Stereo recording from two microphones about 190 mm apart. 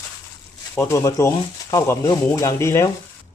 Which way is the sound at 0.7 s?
15° left (ahead or behind).